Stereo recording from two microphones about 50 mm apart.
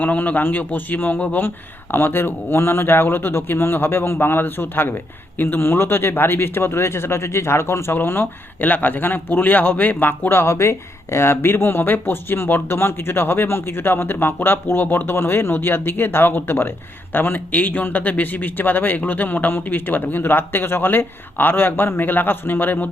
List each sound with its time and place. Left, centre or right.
0.0 s speech: left
7.9 s speech: left
10.5 s speech: left